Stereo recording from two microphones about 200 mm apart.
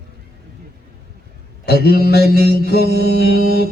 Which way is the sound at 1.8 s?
55° left (ahead or behind).